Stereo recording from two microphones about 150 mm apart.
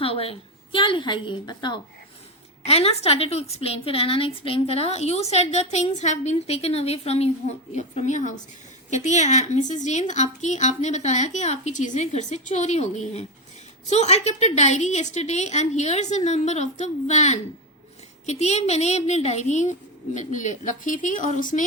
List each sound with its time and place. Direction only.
0.0 s a woman's voice: 40° left (ahead or behind)
2.6 s a woman's voice: 40° left (ahead or behind); by 21.6 s 60° left (ahead or behind)